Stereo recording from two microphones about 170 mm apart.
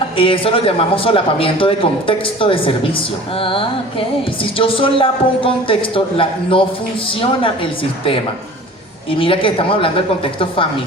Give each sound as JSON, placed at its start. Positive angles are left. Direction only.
{"t": 0.2, "sound": "speech", "side_deg": 30}